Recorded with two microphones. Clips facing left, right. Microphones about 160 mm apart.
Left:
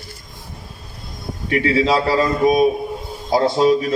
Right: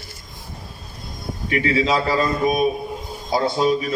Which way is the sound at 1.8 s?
30° left (ahead or behind).